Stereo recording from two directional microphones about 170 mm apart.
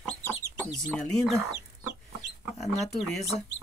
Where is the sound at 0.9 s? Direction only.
Centre (ahead or behind).